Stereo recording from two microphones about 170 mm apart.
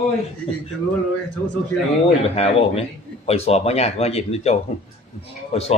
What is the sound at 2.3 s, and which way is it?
Speech, 35° left (ahead or behind).